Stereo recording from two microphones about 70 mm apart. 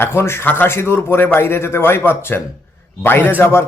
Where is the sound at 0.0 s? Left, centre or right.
Left.